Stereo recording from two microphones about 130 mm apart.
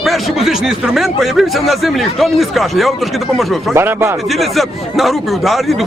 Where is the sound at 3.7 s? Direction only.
20° right (ahead or behind).